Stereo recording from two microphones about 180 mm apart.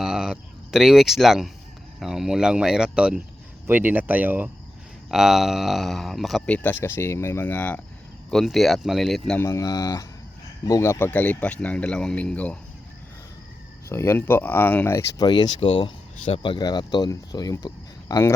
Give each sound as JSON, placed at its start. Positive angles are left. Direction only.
{"t": 0.0, "sound": "a sound", "side_deg": -5}
{"t": 2.0, "sound": "speech", "side_deg": 0}
{"t": 9.4, "sound": "speech", "side_deg": 15}
{"t": 13.9, "sound": "speech", "side_deg": 15}